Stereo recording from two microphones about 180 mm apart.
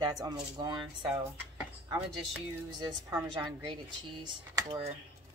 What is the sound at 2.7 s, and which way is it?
Speech, 20° right (ahead or behind).